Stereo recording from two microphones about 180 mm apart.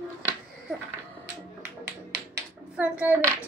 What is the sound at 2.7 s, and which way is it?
Hands, 10° right (ahead or behind).